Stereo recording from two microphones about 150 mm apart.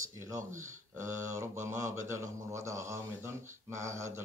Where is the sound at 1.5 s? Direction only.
55° right (ahead or behind).